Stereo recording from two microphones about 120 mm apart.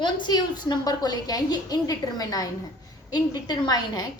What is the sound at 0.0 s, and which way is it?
A woman's voice, 40° left (ahead or behind).